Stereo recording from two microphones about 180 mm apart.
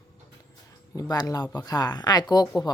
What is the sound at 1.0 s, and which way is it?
Speech, 20° left (ahead or behind).